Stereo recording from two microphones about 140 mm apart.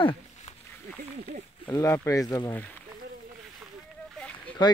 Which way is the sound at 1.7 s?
20° left (ahead or behind).